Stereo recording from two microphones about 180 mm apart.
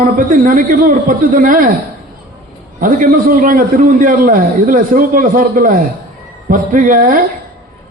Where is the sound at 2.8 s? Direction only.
50° right (ahead or behind).